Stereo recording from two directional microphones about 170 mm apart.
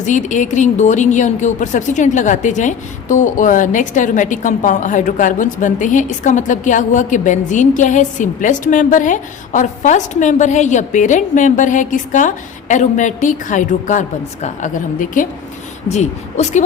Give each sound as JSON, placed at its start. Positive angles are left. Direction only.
{"t": 0.0, "sound": "speech", "side_deg": 45}